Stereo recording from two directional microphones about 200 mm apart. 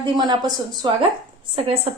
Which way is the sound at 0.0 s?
20° right (ahead or behind).